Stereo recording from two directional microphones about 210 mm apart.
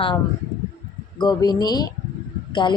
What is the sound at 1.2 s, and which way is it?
A woman's voice, 20° left (ahead or behind).